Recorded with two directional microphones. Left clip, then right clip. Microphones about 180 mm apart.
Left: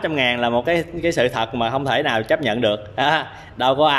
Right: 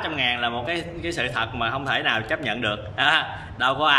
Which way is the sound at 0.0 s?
40° left (ahead or behind).